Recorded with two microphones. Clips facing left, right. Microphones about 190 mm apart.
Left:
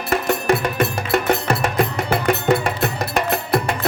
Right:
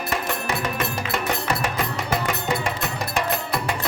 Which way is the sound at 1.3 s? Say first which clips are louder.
Left 5 dB; 60° left (ahead or behind).